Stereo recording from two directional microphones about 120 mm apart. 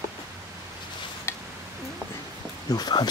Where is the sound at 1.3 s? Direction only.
20° left (ahead or behind).